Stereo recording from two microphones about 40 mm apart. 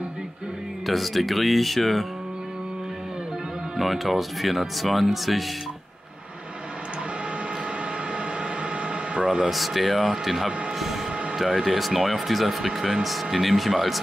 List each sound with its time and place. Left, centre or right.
0.8 s speech: centre
3.7 s speech: centre
8.8 s a sound: right
9.5 s speech: centre